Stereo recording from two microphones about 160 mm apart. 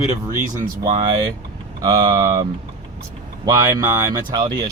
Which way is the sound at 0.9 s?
35° right (ahead or behind).